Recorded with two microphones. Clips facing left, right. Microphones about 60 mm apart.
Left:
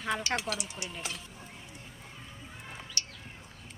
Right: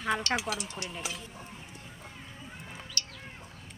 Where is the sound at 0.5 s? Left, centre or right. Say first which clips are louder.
Right 1 dB; centre.